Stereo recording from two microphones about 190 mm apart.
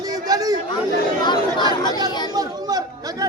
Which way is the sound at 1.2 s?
25° left (ahead or behind).